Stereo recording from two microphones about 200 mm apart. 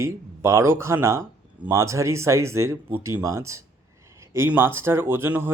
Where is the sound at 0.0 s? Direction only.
15° right (ahead or behind).